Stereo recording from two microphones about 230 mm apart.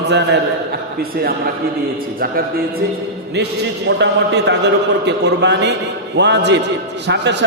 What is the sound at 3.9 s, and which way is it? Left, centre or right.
A man's voice, right.